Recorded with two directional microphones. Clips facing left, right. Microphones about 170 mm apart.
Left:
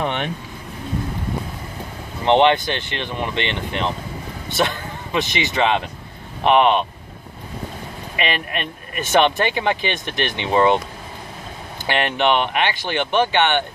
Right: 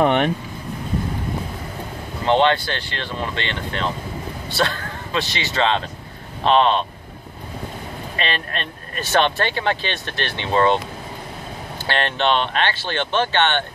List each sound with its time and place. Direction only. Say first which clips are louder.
0.0 s vehicle: right 7 dB; 45° right (ahead or behind)
2.2 s speech: left 2 dB; 20° left (ahead or behind)
8.2 s speech: left 3 dB; 15° left (ahead or behind)
11.8 s speech: left 2 dB; 15° left (ahead or behind)